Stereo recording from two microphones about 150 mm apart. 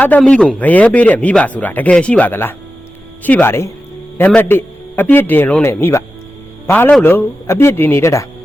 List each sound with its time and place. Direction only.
0.0 s speech: 10° left (ahead or behind)